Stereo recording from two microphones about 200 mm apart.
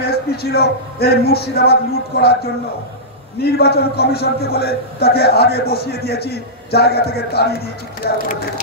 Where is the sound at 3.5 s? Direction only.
50° left (ahead or behind).